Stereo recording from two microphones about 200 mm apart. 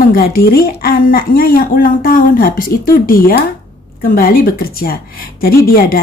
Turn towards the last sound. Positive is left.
turn(degrees=50)  # may be behind; listen again after turning